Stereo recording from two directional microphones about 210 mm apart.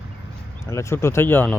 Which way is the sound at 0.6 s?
15° left (ahead or behind).